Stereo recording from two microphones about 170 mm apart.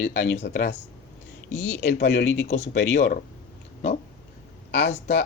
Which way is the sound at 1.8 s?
85° left.